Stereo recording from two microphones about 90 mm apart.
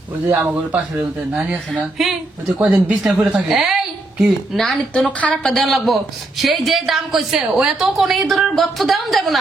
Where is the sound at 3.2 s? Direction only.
10° right (ahead or behind).